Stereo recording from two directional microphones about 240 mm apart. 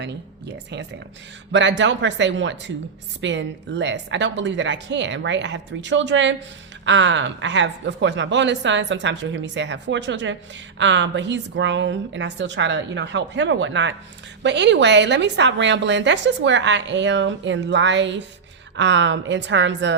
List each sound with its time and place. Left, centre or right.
0.0 s a woman's voice: right